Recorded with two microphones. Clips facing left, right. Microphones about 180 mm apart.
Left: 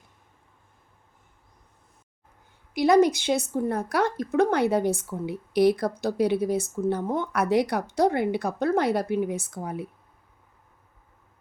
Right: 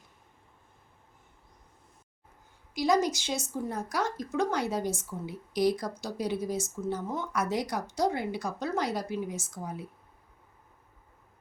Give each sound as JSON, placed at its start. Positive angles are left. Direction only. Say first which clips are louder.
{"t": 2.7, "sound": "a woman's voice", "louder": "left 7 dB", "side_deg": 60}